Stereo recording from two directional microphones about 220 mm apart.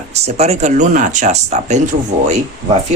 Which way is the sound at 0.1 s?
30° right (ahead or behind).